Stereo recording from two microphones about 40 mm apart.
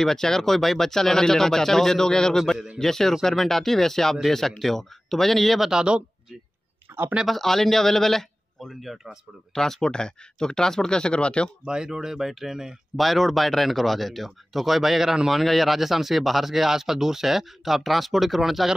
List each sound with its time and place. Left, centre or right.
0.0 s speech: centre
5.6 s speech: centre
6.9 s a sound: right
7.2 s speech: centre; by 11.5 s left
11.6 s speech: centre
12.9 s speech: centre